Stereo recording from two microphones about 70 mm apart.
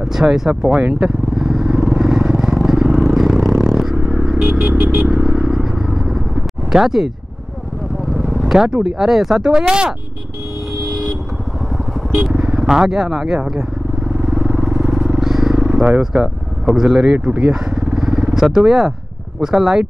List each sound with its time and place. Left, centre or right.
0.0 s speech: centre
1.0 s vehicle: centre
3.9 s vehicle: centre
8.3 s vehicle: centre
8.8 s speech: centre
12.1 s vehicle: centre
16.0 s speech: centre